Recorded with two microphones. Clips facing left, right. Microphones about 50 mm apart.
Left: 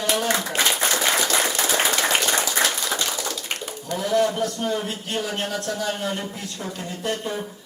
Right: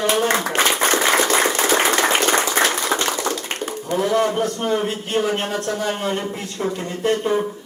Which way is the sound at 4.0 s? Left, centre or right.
Right.